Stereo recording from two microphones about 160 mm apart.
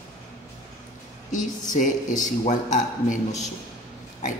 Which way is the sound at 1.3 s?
50° left (ahead or behind).